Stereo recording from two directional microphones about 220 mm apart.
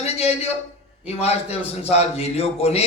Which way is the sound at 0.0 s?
30° left (ahead or behind).